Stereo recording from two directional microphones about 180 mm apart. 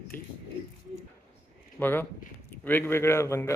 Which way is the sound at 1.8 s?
10° left (ahead or behind).